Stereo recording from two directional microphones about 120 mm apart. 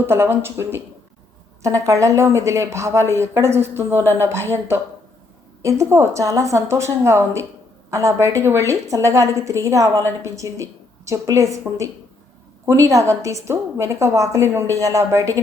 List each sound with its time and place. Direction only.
0.0 s a woman's voice: 20° right (ahead or behind)